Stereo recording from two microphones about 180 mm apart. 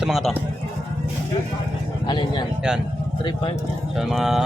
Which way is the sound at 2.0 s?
25° left (ahead or behind).